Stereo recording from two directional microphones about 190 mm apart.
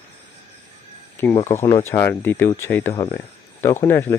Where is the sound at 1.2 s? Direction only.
10° left (ahead or behind).